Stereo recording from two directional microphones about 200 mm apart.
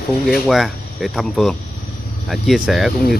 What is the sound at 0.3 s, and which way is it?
Speech, centre (ahead or behind).